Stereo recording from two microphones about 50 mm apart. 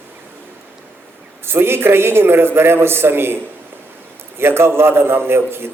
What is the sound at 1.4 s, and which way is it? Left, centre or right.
Speech, right.